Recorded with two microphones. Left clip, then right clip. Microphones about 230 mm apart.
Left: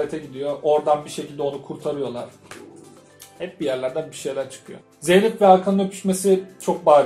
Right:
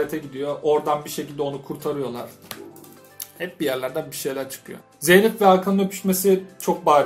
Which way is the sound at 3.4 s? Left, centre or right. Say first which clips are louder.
Left 1 dB; right.